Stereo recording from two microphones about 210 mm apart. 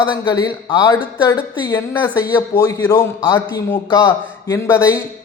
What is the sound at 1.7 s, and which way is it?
A man's voice, 10° left (ahead or behind).